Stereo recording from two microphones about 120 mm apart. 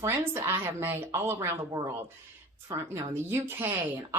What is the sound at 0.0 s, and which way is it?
Speech, 20° right (ahead or behind).